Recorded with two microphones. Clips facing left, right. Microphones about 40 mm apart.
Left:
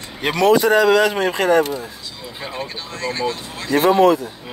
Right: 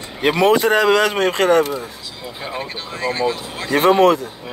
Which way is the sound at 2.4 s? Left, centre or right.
Centre.